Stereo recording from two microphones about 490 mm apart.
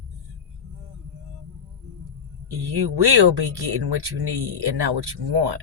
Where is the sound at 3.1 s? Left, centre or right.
Right.